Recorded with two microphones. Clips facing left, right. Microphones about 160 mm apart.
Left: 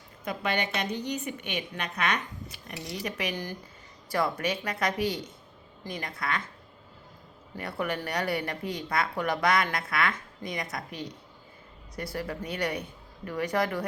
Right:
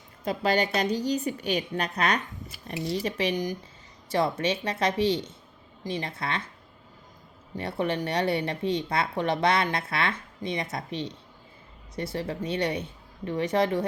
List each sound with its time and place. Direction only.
0.3 s a woman's voice: 35° right (ahead or behind)
3.3 s speech: 15° right (ahead or behind)
7.5 s speech: 25° right (ahead or behind)